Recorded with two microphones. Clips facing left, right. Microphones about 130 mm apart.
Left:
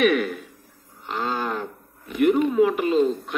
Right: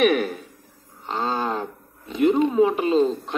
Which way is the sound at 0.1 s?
35° right (ahead or behind).